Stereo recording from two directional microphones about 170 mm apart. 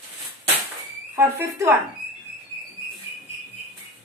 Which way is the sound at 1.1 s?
15° right (ahead or behind).